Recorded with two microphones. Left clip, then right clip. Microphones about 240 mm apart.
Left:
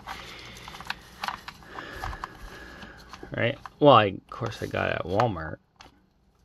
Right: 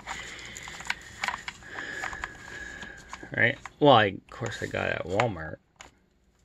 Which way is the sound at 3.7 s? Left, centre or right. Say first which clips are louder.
Left 3 dB; centre.